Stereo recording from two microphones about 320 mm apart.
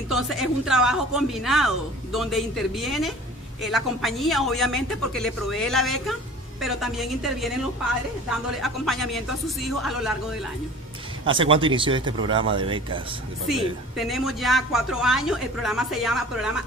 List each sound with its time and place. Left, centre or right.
0.1 s speech: centre
11.3 s speech: centre
13.5 s speech: centre